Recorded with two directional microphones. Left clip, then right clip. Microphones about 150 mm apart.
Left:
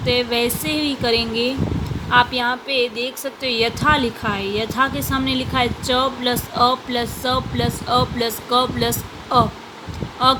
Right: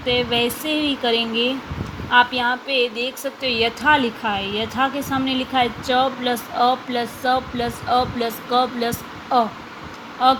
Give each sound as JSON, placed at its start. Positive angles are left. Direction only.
{"t": 0.0, "sound": "a woman's voice", "side_deg": 30}